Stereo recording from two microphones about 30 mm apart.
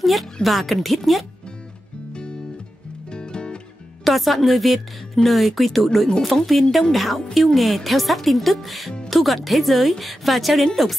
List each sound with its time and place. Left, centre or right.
0.0 s a woman's voice: centre
2.1 s guitar: left
3.1 s music: left
4.0 s a woman's voice: centre